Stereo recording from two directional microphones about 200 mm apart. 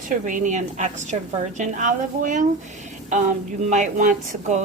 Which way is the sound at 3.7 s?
35° right (ahead or behind).